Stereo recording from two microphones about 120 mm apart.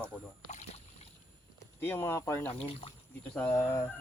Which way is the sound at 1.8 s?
20° left (ahead or behind).